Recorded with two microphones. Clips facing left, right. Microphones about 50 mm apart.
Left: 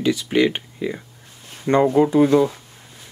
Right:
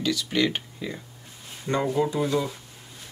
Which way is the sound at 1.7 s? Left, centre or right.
Left.